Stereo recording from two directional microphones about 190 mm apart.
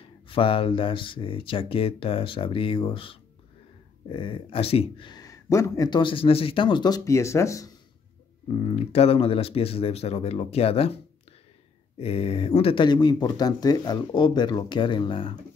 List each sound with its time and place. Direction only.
0.3 s speech: 30° left (ahead or behind)
8.5 s speech: 35° left (ahead or behind)
12.0 s speech: 30° left (ahead or behind)